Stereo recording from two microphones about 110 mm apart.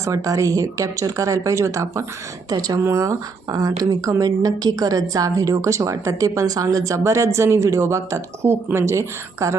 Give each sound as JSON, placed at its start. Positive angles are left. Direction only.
{"t": 0.0, "sound": "speech", "side_deg": -30}